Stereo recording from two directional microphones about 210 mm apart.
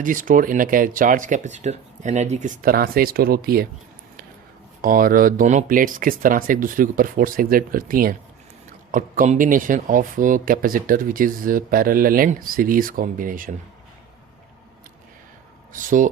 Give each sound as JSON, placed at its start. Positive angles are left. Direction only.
{"t": 0.0, "sound": "speech", "side_deg": -40}
{"t": 4.8, "sound": "speech", "side_deg": -40}
{"t": 15.7, "sound": "speech", "side_deg": -40}